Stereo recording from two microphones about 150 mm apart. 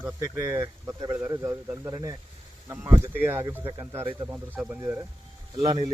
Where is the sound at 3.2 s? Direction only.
15° right (ahead or behind).